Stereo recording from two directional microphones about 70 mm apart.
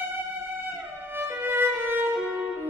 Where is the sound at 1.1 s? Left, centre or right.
Right.